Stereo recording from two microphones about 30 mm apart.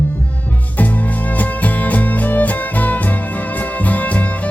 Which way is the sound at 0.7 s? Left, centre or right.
Left.